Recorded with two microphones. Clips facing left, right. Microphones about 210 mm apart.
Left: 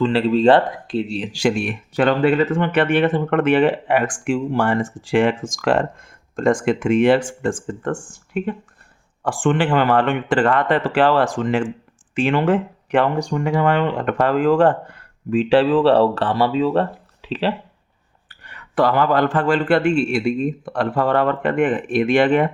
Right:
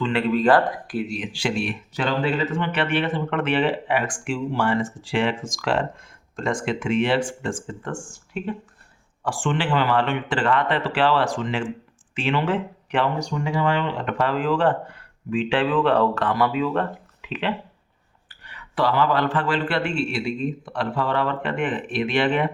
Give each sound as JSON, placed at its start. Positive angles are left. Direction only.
{"t": 0.0, "sound": "speech", "side_deg": 35}
{"t": 1.3, "sound": "speech", "side_deg": 45}
{"t": 18.3, "sound": "speech", "side_deg": 50}